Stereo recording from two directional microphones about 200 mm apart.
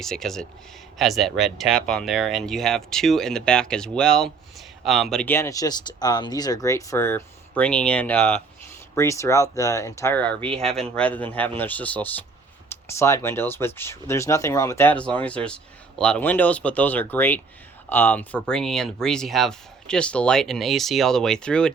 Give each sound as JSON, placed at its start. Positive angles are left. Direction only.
{"t": 0.0, "sound": "speech", "side_deg": 0}
{"t": 10.5, "sound": "speech", "side_deg": -30}
{"t": 10.8, "sound": "speech", "side_deg": 5}